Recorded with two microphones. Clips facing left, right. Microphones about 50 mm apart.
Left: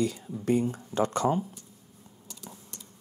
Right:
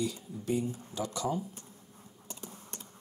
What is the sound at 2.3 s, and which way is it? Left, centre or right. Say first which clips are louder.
Typing: right 1 dB; right.